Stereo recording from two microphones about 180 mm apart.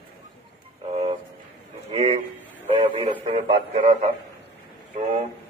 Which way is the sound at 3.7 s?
40° right (ahead or behind).